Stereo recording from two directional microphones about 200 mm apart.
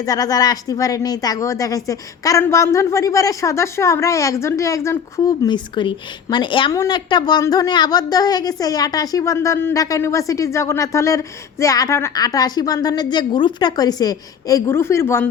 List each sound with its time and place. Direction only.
0.0 s speech: 20° left (ahead or behind)